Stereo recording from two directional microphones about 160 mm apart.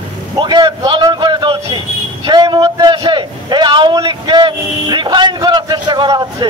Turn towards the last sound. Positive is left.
turn(degrees=-25)  # may be behind; listen again after turning